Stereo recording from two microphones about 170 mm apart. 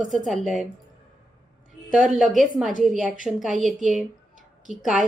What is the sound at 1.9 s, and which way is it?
A woman's voice, centre (ahead or behind).